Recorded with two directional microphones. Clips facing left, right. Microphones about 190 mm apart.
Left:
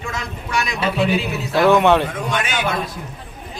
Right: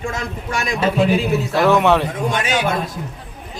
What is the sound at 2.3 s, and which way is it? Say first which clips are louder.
Speech: right 3 dB; 35° right (ahead or behind).